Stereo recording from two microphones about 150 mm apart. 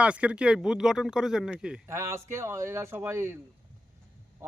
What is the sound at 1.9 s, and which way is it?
Speech, 20° right (ahead or behind).